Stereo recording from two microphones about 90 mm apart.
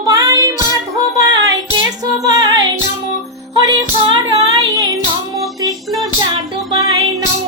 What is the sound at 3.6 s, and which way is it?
Child singing, 40° right (ahead or behind).